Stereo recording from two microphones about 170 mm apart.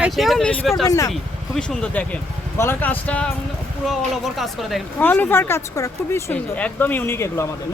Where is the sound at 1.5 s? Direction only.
5° left (ahead or behind).